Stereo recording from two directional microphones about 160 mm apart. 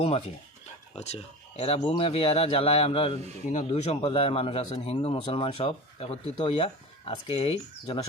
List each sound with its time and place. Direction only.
0.9 s a man's voice: 40° left (ahead or behind)